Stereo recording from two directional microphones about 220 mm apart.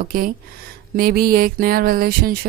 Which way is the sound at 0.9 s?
45° right (ahead or behind).